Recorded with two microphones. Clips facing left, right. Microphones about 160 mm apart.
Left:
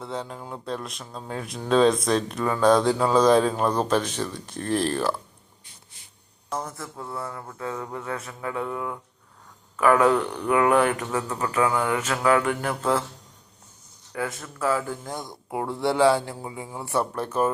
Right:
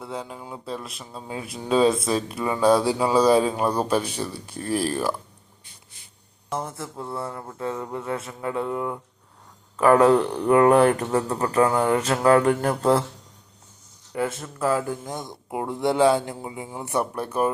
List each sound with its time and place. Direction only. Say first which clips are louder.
0.0 s speech: left 1 dB; 10° right (ahead or behind)
6.6 s speech: right 3 dB; 25° right (ahead or behind)
9.7 s a sound: right 3 dB; 30° right (ahead or behind)
14.1 s speech: right 4 dB; 25° right (ahead or behind)